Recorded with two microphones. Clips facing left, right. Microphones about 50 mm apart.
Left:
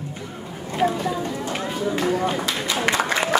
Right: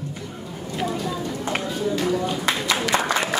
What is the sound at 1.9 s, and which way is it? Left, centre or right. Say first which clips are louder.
Run: left 2 dB; left.